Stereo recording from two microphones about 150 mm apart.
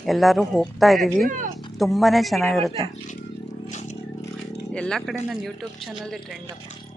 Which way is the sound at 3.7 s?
50° left (ahead or behind).